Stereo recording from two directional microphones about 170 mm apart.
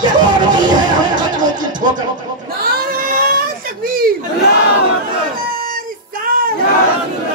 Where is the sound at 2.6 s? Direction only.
60° right (ahead or behind).